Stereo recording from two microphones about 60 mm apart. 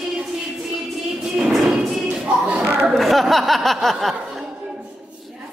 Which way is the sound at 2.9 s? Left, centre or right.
Centre.